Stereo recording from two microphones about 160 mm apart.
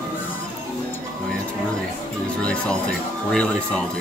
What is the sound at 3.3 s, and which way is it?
Speech, 5° left (ahead or behind).